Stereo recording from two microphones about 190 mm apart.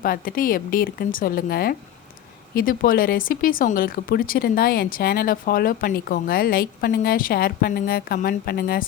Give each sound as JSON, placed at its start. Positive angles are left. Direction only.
{"t": 0.0, "sound": "speech", "side_deg": 50}